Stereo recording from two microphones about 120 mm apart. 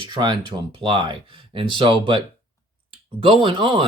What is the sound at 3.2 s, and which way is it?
Speech, 45° right (ahead or behind).